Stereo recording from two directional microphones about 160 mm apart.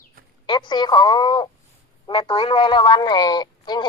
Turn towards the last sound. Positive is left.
turn(degrees=25)  # may be behind; listen again after turning